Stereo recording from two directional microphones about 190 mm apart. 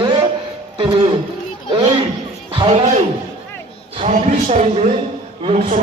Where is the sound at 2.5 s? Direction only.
30° right (ahead or behind).